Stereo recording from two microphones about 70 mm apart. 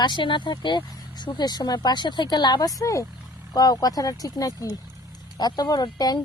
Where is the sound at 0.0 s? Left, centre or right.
Left.